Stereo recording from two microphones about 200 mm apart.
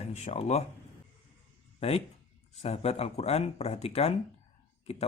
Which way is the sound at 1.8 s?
30° left (ahead or behind).